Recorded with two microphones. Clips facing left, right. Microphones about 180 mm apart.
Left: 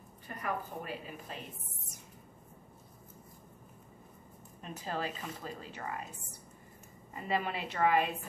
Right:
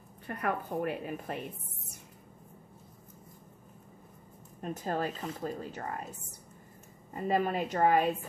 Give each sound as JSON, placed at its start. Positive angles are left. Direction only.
{"t": 0.3, "sound": "speech", "side_deg": -65}
{"t": 4.6, "sound": "speech", "side_deg": -45}
{"t": 7.2, "sound": "speech", "side_deg": -45}